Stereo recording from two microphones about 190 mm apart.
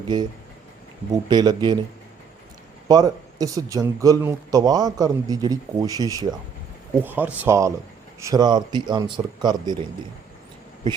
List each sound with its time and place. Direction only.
1.1 s speech: 20° right (ahead or behind)
2.9 s speech: 20° right (ahead or behind)